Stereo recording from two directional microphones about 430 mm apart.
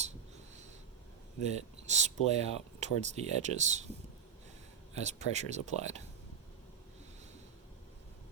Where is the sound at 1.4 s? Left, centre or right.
Centre.